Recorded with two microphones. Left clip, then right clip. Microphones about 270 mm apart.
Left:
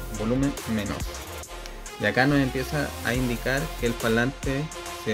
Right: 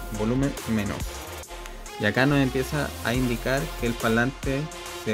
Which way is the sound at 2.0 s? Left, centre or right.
Right.